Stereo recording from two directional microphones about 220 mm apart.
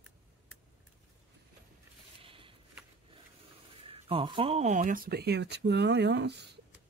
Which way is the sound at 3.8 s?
25° right (ahead or behind).